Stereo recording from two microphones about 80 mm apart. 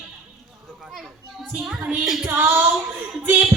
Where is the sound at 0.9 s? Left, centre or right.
Centre.